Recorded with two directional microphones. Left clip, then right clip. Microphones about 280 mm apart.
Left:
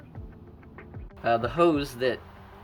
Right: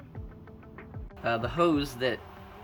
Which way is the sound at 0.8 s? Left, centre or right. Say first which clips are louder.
Left 1 dB; centre.